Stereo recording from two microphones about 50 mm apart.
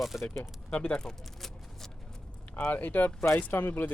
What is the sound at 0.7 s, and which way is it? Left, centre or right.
Speech, left.